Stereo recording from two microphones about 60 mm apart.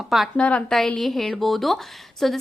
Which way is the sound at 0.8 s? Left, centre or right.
Centre.